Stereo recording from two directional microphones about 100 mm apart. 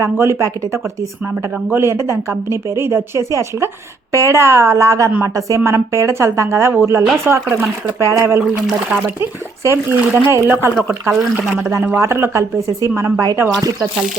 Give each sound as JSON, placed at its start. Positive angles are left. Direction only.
{"t": 0.0, "sound": "a woman's voice", "side_deg": -30}
{"t": 9.6, "sound": "speech", "side_deg": -25}
{"t": 11.1, "sound": "speech", "side_deg": -5}
{"t": 11.8, "sound": "a woman's voice", "side_deg": -25}